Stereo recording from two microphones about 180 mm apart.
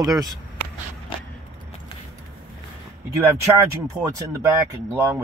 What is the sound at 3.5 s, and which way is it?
Speech, 15° right (ahead or behind).